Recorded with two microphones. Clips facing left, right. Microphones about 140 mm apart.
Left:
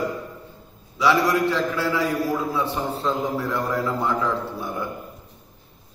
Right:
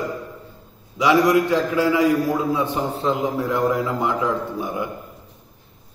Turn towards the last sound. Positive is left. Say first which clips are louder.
# right 3 dB
turn(degrees=-15)  # may be behind; listen again after turning